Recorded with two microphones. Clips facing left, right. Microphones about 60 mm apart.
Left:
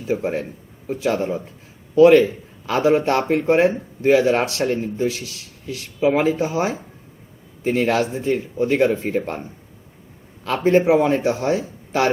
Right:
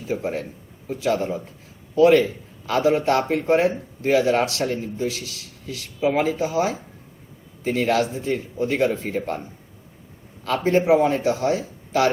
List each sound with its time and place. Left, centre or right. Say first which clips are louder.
0.2 s a man's voice: left 3 dB; left